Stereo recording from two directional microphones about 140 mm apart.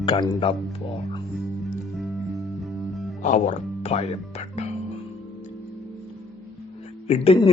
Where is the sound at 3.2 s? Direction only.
60° left (ahead or behind).